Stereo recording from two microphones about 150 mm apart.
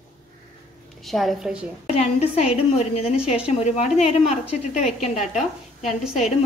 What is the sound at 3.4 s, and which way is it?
A woman's voice, 50° left (ahead or behind).